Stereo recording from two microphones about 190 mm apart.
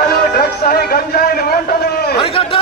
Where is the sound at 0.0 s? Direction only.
55° left (ahead or behind).